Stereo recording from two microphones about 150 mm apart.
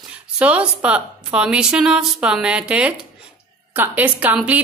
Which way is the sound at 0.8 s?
10° right (ahead or behind).